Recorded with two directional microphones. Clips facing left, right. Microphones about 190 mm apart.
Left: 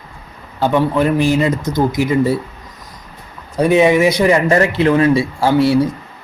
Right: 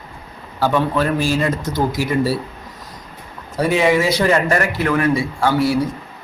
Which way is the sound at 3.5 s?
20° left (ahead or behind).